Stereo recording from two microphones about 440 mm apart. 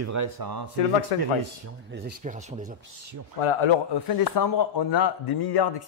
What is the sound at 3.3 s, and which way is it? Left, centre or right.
Speech, left.